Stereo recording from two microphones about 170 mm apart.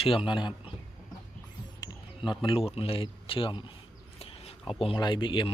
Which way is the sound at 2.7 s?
35° left (ahead or behind).